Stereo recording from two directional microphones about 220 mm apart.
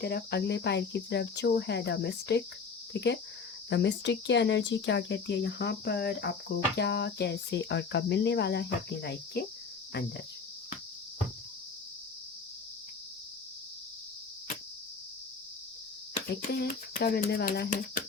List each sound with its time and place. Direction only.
0.0 s speech: 45° left (ahead or behind)
16.5 s speech: 45° left (ahead or behind)